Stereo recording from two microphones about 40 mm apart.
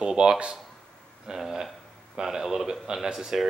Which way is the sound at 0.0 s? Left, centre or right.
Right.